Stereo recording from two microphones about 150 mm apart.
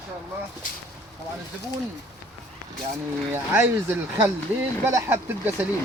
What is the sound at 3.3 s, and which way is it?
Speech, 15° right (ahead or behind).